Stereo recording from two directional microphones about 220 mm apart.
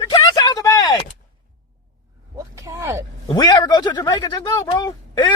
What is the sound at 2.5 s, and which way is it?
Speech, 15° right (ahead or behind).